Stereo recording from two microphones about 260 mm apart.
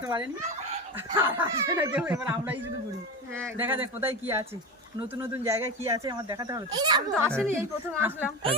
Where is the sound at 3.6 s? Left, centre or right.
Centre.